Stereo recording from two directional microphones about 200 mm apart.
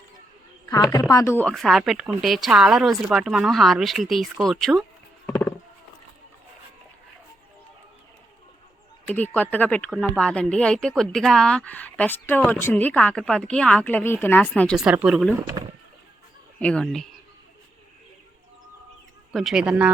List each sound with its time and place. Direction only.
0.7 s a woman's voice: 15° left (ahead or behind); by 5.3 s centre (ahead or behind)
5.3 s a sound: 10° left (ahead or behind)
9.0 s a woman's voice: 10° left (ahead or behind)
14.8 s speech: 5° right (ahead or behind)
16.6 s speech: 5° left (ahead or behind)
19.3 s speech: centre (ahead or behind)